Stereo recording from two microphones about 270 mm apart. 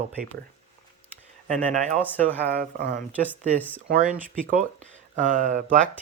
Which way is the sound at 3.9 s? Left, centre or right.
Right.